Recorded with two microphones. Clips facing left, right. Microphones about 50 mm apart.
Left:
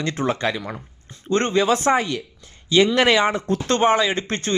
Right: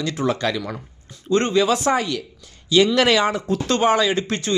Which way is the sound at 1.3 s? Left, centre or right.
Left.